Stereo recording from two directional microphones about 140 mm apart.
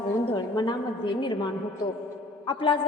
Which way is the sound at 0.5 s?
30° left (ahead or behind).